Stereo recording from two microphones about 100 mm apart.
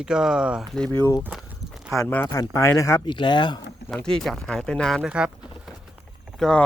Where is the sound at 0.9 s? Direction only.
25° left (ahead or behind).